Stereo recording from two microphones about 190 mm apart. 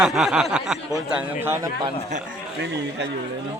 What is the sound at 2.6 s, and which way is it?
Speech, 65° right (ahead or behind).